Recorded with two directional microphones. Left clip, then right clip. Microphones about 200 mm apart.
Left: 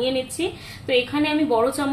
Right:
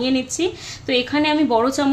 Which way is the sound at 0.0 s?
40° right (ahead or behind).